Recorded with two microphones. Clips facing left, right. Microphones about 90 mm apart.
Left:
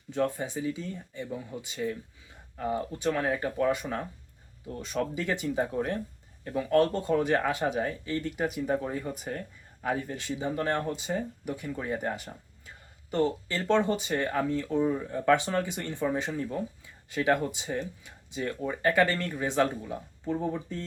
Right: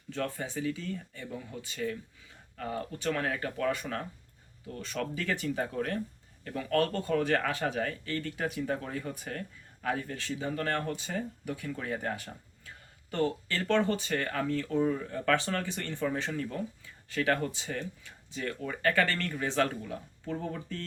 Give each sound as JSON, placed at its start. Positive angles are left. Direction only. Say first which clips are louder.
{"t": 0.1, "sound": "speech", "louder": "left 5 dB", "side_deg": 15}